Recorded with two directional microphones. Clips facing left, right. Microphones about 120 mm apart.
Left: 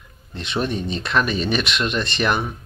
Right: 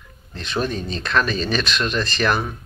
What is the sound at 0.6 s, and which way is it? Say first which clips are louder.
Speech: left 1 dB; 25° left (ahead or behind).